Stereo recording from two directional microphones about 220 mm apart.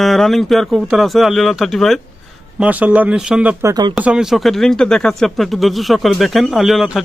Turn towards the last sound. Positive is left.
turn(degrees=0)  # may be behind; listen again after turning